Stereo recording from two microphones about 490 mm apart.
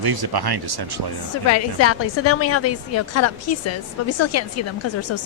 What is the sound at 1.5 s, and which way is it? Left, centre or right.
A woman's voice, left.